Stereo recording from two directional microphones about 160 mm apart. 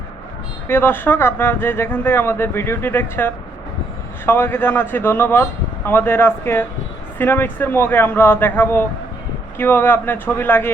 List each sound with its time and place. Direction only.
0.7 s speech: 15° left (ahead or behind)